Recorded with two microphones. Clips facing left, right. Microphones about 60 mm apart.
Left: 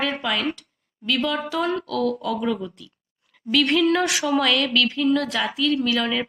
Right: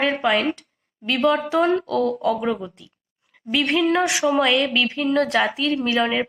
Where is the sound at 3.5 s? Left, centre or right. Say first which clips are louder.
Even; centre.